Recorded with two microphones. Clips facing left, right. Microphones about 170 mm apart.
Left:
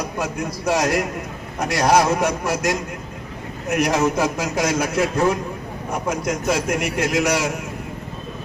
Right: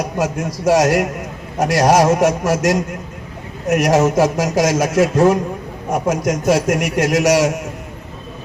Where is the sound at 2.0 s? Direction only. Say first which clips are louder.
Right 6 dB; 45° right (ahead or behind).